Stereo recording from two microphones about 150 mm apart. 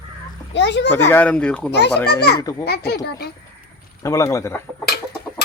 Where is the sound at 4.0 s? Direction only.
20° left (ahead or behind).